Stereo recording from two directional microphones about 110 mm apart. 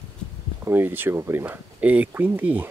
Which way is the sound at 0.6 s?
20° right (ahead or behind).